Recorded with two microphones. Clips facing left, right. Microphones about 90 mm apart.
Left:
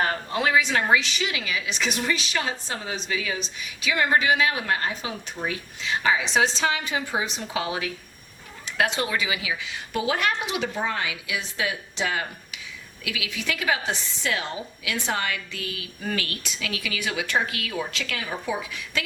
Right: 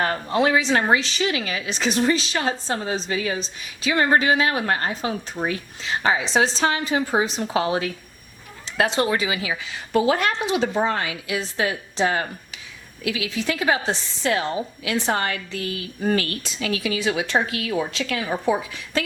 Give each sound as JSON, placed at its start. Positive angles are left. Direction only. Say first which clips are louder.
{"t": 0.0, "sound": "a woman's voice", "louder": "right 4 dB", "side_deg": -35}